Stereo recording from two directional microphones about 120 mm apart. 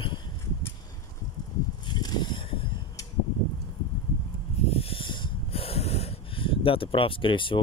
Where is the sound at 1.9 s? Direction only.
35° left (ahead or behind).